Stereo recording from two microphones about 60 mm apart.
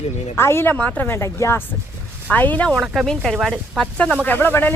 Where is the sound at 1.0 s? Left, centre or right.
Left.